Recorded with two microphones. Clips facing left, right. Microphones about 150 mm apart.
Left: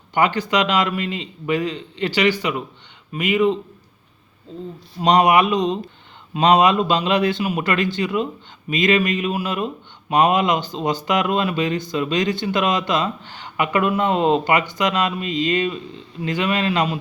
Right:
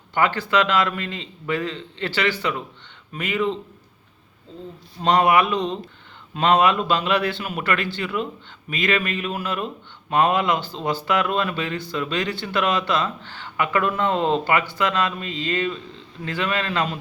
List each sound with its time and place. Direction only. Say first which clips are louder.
0.1 s speech: left 2 dB; 15° left (ahead or behind)
4.9 s speech: left 3 dB; 15° left (ahead or behind)